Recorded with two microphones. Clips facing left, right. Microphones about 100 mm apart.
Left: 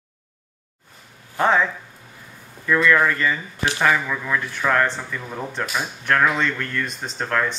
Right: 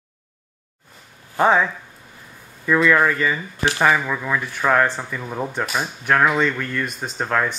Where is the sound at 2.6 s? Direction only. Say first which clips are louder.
Right 1 dB; 15° right (ahead or behind).